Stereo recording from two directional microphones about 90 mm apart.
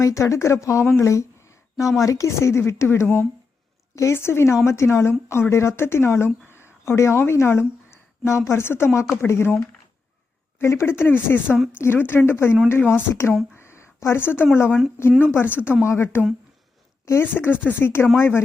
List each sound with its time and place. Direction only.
0.0 s speech: 35° left (ahead or behind)
11.4 s speech: 5° right (ahead or behind)
11.7 s speech: 25° left (ahead or behind)
13.5 s a sound: 30° left (ahead or behind)
14.5 s speech: 25° left (ahead or behind)